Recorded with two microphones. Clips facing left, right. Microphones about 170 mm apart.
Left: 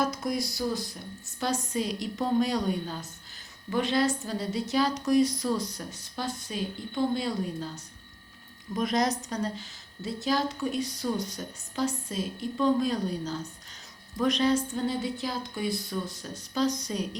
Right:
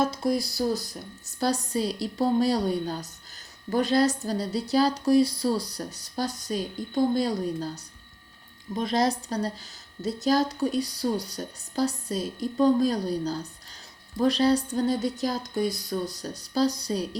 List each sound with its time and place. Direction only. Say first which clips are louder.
0.0 s a woman's voice: right 4 dB; 30° right (ahead or behind)
8.7 s a woman's voice: right 2 dB; 30° right (ahead or behind)